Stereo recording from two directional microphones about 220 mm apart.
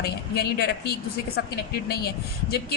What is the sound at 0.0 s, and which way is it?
Speech, 45° left (ahead or behind).